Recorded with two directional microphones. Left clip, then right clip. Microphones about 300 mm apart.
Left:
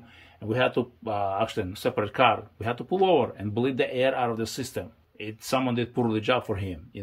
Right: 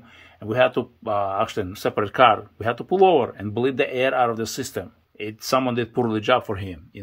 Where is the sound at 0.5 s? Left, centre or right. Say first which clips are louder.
Right 5 dB; centre.